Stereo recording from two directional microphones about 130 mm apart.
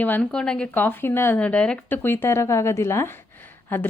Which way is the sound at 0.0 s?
10° left (ahead or behind).